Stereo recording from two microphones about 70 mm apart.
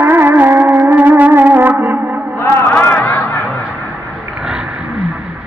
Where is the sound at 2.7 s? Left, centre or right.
Left.